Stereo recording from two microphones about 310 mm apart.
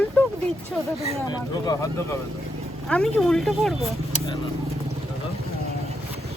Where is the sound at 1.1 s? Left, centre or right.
Centre.